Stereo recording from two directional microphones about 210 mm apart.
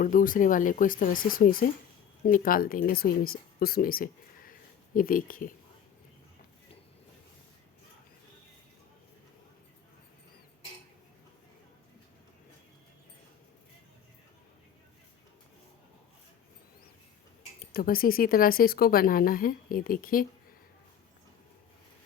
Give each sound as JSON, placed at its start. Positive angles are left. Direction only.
{"t": 0.0, "sound": "speech", "side_deg": 40}
{"t": 17.7, "sound": "speech", "side_deg": 45}